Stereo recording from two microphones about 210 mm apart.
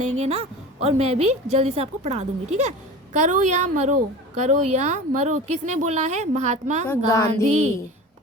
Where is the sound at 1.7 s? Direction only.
30° right (ahead or behind).